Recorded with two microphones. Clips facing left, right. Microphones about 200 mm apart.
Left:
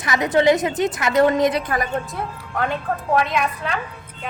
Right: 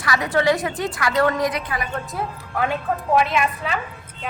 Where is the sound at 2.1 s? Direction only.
5° right (ahead or behind).